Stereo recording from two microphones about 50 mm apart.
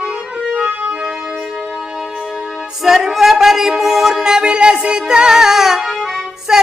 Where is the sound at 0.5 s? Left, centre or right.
Right.